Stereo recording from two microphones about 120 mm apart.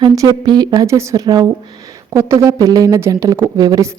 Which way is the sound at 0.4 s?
35° right (ahead or behind).